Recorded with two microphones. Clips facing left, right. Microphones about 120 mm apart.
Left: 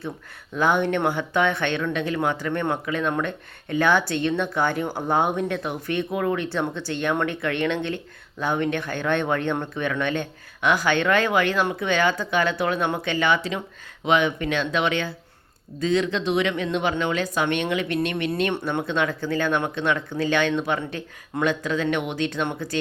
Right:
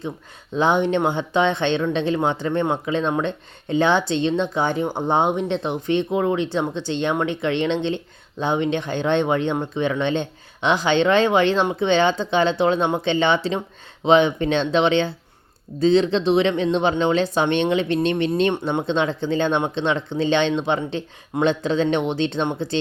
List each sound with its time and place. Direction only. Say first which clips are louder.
0.5 s speech: right 3 dB; 20° right (ahead or behind)